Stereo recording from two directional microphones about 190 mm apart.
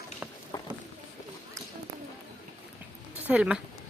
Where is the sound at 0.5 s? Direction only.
15° left (ahead or behind).